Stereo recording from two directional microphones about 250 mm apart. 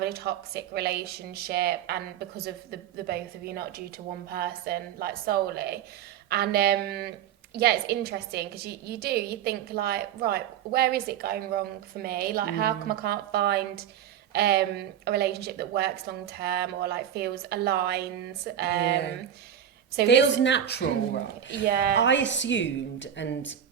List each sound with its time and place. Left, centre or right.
0.0 s a woman's voice: right
20.1 s speech: left
21.7 s a woman's voice: right
21.9 s speech: left